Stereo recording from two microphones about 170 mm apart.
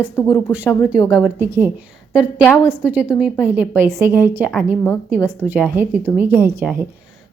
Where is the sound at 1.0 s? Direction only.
20° left (ahead or behind).